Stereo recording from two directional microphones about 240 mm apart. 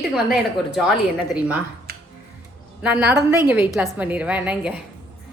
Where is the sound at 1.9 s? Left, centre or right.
Right.